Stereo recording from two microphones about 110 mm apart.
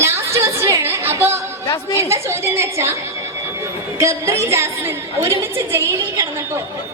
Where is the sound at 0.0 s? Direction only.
25° right (ahead or behind).